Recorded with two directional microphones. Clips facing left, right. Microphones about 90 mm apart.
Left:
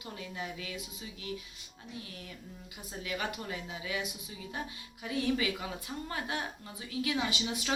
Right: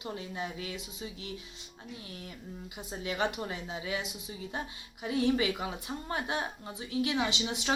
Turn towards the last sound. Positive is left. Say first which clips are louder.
# right 2 dB
turn(degrees=-25)  # may be behind; listen again after turning